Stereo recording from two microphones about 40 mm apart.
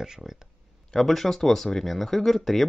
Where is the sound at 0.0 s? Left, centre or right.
Centre.